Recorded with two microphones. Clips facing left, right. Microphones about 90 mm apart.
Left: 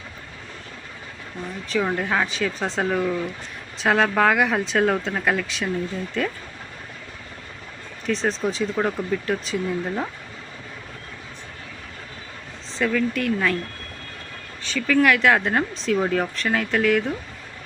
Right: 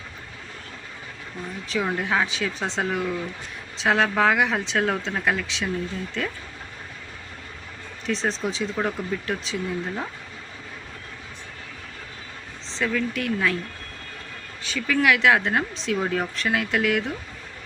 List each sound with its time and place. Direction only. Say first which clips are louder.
1.7 s speech: left 2 dB; centre (ahead or behind)
8.0 s speech: left 3 dB; centre (ahead or behind)
12.7 s speech: left 3 dB; centre (ahead or behind)
14.6 s speech: left 3 dB; 5° right (ahead or behind)